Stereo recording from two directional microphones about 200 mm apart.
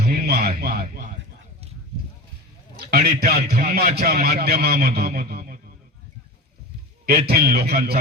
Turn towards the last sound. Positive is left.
turn(degrees=-50)  # may be behind; listen again after turning